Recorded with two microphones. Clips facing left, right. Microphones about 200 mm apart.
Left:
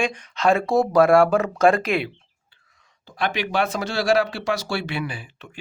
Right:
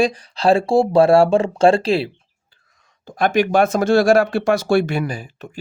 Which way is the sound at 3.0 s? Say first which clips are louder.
Right 8 dB; 45° right (ahead or behind).